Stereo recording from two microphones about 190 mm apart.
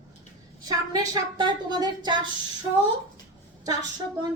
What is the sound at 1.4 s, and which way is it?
Speech, 20° right (ahead or behind).